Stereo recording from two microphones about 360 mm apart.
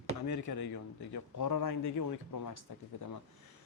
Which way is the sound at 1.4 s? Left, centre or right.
Left.